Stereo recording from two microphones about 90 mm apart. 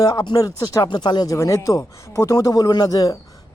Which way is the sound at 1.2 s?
35° left (ahead or behind).